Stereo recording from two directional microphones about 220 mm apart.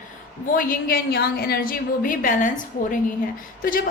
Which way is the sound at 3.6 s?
40° left (ahead or behind).